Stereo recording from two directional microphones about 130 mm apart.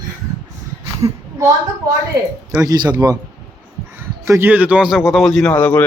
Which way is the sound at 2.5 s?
20° right (ahead or behind).